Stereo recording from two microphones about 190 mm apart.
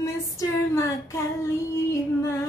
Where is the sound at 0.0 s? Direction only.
15° left (ahead or behind).